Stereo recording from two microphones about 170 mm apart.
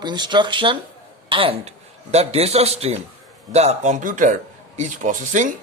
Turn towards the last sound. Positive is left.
turn(degrees=-50)  # may be behind; listen again after turning